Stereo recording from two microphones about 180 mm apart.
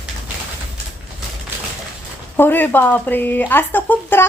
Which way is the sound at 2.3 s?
10° left (ahead or behind).